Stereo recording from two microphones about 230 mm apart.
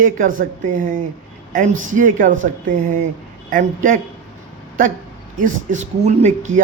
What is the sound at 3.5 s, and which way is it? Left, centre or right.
Speech, right.